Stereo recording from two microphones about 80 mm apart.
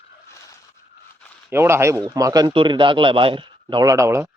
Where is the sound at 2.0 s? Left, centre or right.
Right.